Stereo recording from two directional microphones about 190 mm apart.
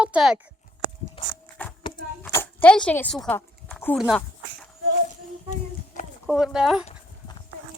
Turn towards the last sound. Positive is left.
turn(degrees=-5)  # may be behind; listen again after turning